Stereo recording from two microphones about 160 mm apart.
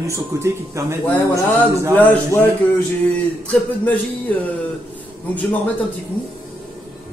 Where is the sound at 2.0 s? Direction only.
10° left (ahead or behind).